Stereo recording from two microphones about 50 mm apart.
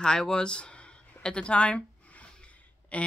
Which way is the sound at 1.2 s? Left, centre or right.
Centre.